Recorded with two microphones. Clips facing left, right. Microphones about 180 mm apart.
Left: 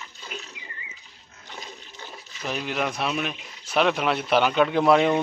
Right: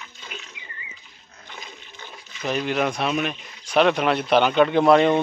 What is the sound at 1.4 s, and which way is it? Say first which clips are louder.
Dog: left 1 dB; 35° left (ahead or behind).